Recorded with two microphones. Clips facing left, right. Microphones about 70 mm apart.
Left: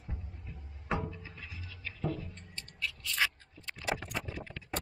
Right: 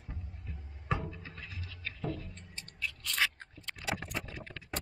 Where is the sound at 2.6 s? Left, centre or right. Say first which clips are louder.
Left 1 dB; right.